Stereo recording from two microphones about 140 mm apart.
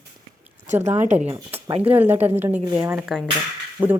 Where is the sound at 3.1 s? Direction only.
Centre (ahead or behind).